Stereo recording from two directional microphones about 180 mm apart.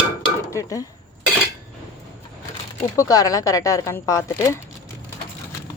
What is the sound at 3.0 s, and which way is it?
Speech, 20° left (ahead or behind).